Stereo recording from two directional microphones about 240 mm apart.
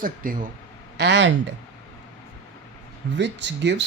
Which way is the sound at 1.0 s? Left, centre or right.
Right.